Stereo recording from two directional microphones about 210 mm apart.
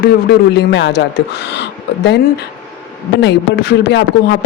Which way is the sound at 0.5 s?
55° left (ahead or behind).